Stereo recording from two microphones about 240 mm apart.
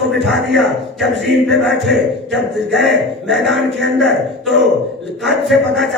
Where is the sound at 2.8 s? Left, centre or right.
Centre.